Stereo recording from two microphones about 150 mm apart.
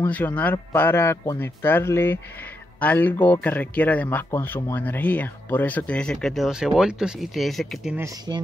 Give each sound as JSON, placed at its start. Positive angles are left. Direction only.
{"t": 0.0, "sound": "speech", "side_deg": 10}
{"t": 7.9, "sound": "speech", "side_deg": -20}